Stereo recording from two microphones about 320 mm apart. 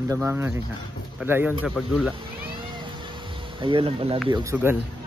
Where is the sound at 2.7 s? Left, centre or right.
Centre.